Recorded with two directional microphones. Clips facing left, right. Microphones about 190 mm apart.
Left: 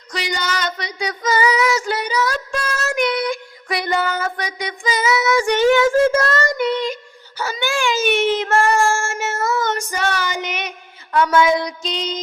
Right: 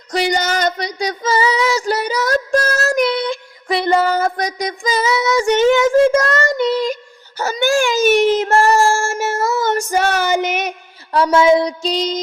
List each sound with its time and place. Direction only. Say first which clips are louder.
0.1 s female singing: right 7 dB; 45° right (ahead or behind); by 5.6 s 20° right (ahead or behind)
5.7 s child singing: right 3 dB; 20° right (ahead or behind); by 10.7 s 45° right (ahead or behind)
11.1 s a sound: right 4 dB; 30° right (ahead or behind)